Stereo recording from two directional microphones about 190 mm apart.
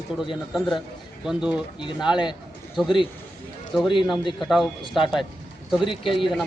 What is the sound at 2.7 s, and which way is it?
Speech, centre (ahead or behind).